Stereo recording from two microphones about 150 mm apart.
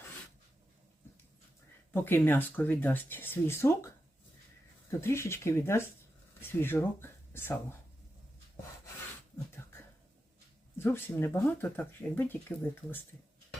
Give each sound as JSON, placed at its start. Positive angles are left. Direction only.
{"t": 1.9, "sound": "speech", "side_deg": 15}
{"t": 4.9, "sound": "speech", "side_deg": 15}
{"t": 10.8, "sound": "speech", "side_deg": 15}